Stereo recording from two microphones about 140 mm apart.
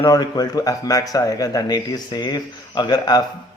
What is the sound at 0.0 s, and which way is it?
A man's voice, 25° left (ahead or behind).